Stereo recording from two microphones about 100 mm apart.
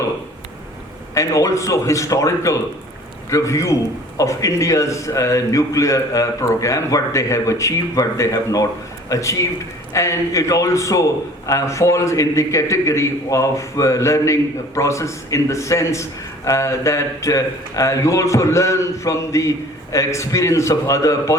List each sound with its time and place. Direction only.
1.1 s a man's voice: 30° left (ahead or behind)